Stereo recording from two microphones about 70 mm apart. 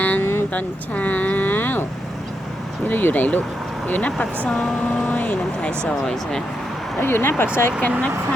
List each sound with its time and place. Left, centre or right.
0.0 s vehicle: left
0.5 s speech: left
2.8 s speech: left
4.4 s speech: centre
5.0 s speech: left
7.0 s speech: left